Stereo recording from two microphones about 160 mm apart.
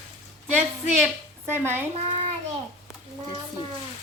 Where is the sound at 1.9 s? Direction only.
40° right (ahead or behind).